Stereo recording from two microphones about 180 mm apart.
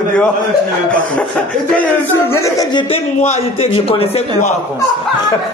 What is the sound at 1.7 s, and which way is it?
Speech, 10° left (ahead or behind).